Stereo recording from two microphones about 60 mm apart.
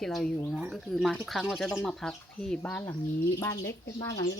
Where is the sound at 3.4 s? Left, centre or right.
Left.